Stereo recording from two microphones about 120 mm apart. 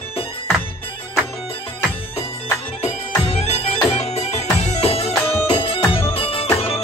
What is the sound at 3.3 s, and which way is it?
Music, 60° left (ahead or behind).